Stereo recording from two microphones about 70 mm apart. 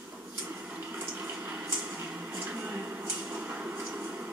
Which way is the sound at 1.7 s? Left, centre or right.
Centre.